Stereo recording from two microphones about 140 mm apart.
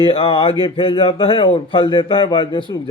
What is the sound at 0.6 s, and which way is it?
A man's voice, 40° left (ahead or behind).